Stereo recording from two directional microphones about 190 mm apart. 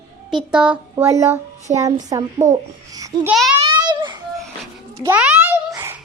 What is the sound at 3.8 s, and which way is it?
Children playing, 25° right (ahead or behind).